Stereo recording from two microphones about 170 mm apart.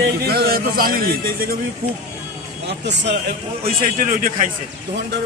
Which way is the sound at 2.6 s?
80° right.